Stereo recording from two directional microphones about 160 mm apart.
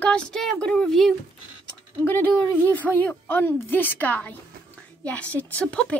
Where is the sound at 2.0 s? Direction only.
10° left (ahead or behind).